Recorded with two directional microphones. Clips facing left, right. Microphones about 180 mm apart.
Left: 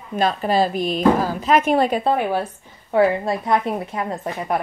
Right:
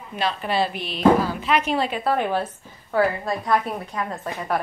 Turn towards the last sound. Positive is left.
turn(degrees=20)  # may be behind; listen again after turning